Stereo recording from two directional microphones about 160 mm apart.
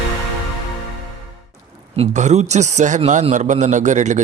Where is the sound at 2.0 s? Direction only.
45° right (ahead or behind).